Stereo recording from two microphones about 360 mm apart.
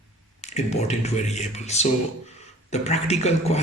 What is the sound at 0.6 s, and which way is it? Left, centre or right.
A man's voice, centre.